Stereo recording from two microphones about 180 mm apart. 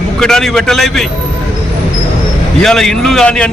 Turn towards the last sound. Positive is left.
turn(degrees=5)  # may be behind; listen again after turning